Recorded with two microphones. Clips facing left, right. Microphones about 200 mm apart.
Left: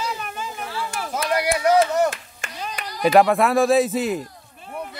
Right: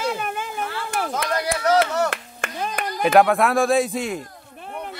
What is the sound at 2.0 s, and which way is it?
Clapping, 55° right (ahead or behind).